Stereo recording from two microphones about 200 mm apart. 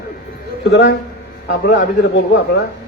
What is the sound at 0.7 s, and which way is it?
Speech, 65° left (ahead or behind).